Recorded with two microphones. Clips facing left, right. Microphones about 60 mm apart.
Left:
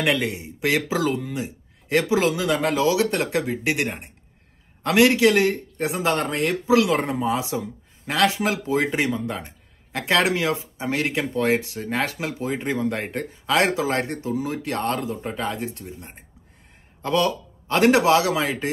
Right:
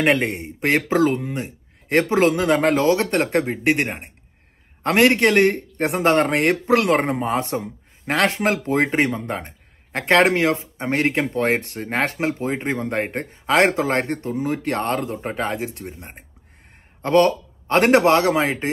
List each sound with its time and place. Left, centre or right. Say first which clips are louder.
0.0 s speech: right 4 dB; right